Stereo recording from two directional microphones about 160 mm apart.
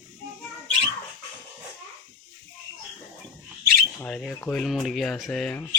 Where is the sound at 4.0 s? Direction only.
5° left (ahead or behind).